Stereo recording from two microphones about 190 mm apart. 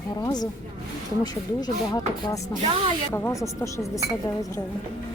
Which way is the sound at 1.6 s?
20° left (ahead or behind).